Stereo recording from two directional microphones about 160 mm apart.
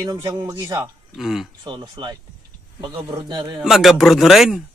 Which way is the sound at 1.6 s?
30° right (ahead or behind).